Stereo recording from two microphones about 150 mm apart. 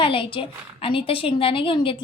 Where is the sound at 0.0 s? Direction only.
35° left (ahead or behind).